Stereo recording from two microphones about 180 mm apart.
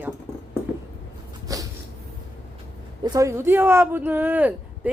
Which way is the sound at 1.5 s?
20° right (ahead or behind).